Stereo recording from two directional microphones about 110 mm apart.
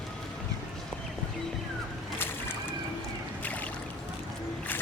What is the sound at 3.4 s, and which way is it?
Boat, 15° left (ahead or behind).